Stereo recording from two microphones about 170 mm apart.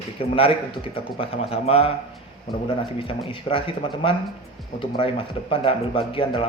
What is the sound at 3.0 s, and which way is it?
A man's voice, 30° left (ahead or behind).